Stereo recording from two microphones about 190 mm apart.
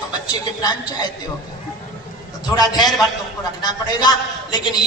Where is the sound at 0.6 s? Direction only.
20° left (ahead or behind).